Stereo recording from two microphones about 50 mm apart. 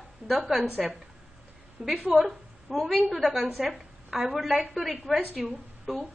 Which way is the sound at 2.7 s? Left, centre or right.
Centre.